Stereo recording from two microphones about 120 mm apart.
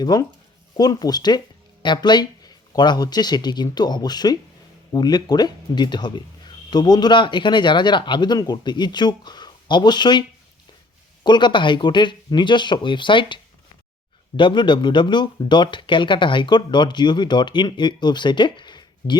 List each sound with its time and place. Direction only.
0.0 s speech: 35° left (ahead or behind)